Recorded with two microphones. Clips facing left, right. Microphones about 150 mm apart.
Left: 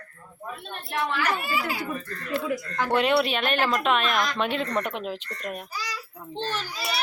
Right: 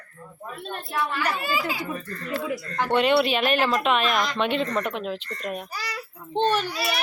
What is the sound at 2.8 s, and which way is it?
Speech, centre (ahead or behind).